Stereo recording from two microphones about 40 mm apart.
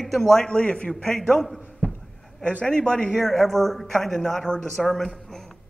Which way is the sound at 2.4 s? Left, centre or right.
Left.